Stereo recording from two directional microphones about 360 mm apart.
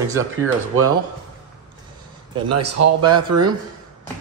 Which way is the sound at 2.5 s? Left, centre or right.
Right.